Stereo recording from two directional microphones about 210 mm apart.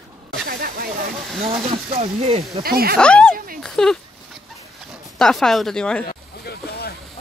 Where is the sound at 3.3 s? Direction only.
45° right (ahead or behind).